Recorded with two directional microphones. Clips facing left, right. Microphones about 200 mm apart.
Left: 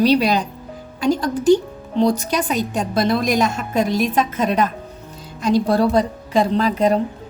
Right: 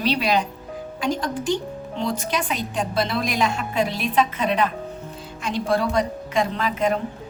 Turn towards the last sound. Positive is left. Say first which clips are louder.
# left 6 dB
turn(degrees=35)  # may be behind; listen again after turning